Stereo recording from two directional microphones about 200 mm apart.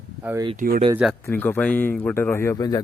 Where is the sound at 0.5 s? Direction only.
45° right (ahead or behind).